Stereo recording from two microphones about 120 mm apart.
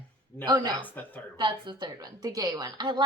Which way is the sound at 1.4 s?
40° right (ahead or behind).